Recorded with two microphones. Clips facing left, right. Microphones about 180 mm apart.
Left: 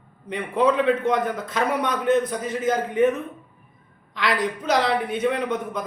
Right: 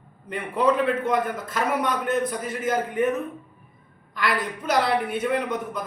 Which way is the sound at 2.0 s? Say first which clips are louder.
Left 4 dB; 25° left (ahead or behind).